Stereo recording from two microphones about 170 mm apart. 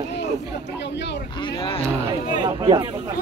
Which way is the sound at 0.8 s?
90° left.